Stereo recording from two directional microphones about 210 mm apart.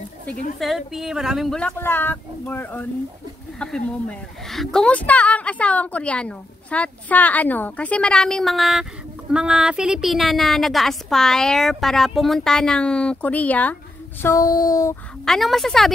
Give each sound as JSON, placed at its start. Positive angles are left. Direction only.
{"t": 0.6, "sound": "a woman's voice", "side_deg": 0}
{"t": 14.2, "sound": "a sound", "side_deg": 15}
{"t": 15.2, "sound": "a woman's voice", "side_deg": 0}